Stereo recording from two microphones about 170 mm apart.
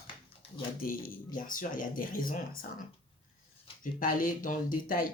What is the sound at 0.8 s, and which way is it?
Speech, 55° left (ahead or behind).